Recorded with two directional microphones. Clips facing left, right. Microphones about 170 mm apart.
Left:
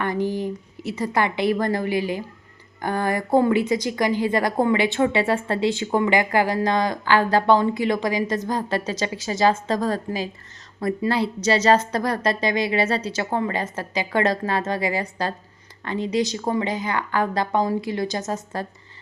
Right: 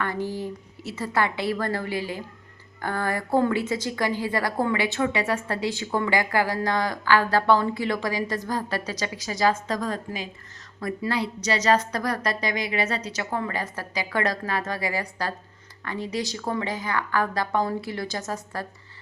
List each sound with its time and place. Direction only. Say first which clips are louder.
0.0 s a woman's voice: left 5 dB; 15° left (ahead or behind)